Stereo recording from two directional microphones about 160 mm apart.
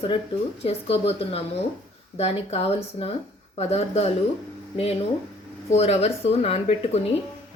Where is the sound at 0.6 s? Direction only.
35° left (ahead or behind).